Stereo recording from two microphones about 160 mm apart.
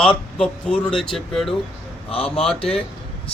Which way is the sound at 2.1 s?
35° left (ahead or behind).